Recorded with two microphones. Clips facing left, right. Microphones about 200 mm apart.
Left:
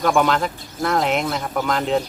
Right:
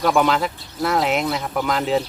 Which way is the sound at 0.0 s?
Centre (ahead or behind).